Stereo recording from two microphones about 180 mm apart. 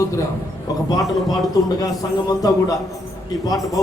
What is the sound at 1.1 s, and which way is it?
Speech, centre (ahead or behind).